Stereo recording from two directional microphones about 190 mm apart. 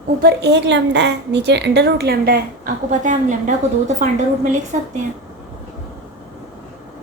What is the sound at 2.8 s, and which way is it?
Speech, 40° right (ahead or behind).